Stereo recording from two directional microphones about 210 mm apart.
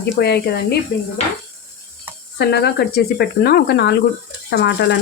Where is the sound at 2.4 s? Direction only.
50° left (ahead or behind).